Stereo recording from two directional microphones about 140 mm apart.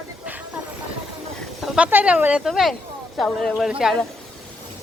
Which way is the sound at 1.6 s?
5° right (ahead or behind).